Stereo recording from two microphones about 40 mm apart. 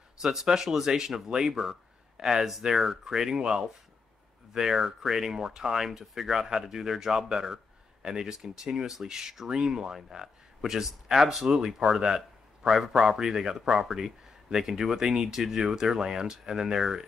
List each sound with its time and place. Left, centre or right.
0.2 s speech: centre